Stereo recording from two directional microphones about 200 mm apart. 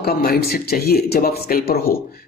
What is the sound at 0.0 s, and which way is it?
Speech, 50° left (ahead or behind).